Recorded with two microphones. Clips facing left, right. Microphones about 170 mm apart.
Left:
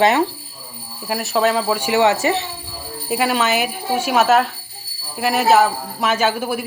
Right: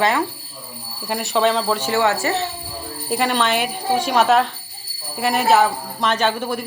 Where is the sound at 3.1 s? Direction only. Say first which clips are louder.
Left 1 dB; 5° left (ahead or behind).